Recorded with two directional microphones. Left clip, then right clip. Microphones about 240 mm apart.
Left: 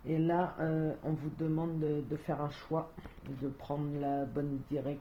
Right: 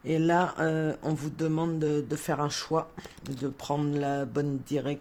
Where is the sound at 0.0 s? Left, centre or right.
Right.